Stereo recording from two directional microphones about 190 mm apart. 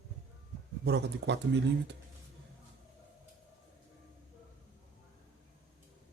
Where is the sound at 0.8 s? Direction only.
60° right (ahead or behind).